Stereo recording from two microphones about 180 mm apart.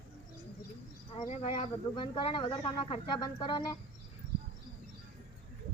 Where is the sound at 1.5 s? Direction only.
25° left (ahead or behind).